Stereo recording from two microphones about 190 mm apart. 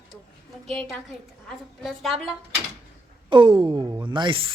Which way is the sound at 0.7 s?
Centre (ahead or behind).